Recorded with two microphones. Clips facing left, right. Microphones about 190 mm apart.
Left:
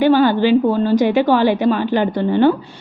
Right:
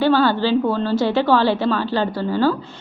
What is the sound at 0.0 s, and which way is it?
A woman's voice, 15° left (ahead or behind).